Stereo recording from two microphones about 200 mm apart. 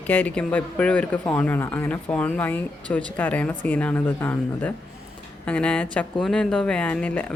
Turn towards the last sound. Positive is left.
turn(degrees=5)  # may be behind; listen again after turning